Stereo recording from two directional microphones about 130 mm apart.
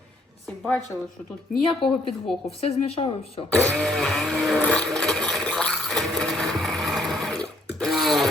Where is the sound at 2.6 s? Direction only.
50° left (ahead or behind).